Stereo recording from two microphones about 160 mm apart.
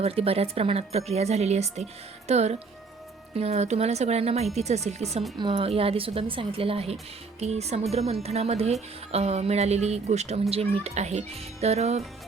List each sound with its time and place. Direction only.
0.0 s speech: 40° right (ahead or behind)
5.4 s speech: 30° right (ahead or behind)